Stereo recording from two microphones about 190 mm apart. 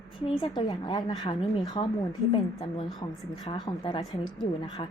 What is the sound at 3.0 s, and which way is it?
A woman's voice, 20° left (ahead or behind).